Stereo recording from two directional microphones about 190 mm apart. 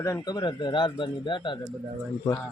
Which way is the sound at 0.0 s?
20° left (ahead or behind).